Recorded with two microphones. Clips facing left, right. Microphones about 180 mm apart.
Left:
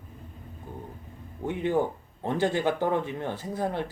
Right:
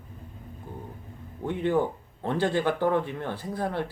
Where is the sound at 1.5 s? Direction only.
15° left (ahead or behind).